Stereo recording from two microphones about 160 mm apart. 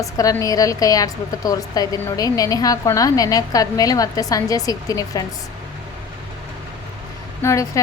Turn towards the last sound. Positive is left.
turn(degrees=15)  # may be behind; listen again after turning